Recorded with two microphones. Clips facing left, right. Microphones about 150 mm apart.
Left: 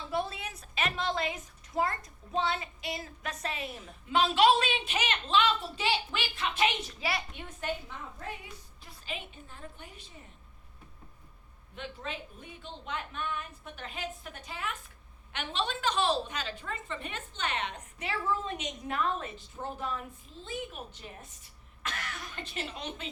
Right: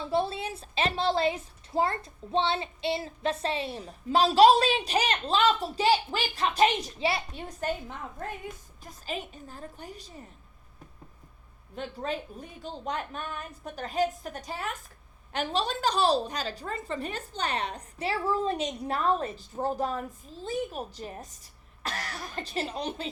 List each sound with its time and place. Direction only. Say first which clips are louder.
0.0 s a woman's voice: right 6 dB; 30° right (ahead or behind)
11.7 s a woman's voice: right 7 dB; 40° right (ahead or behind)